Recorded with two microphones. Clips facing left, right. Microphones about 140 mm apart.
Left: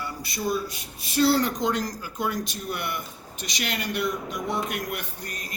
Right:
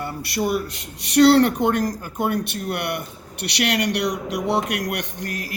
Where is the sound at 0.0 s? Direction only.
60° right (ahead or behind).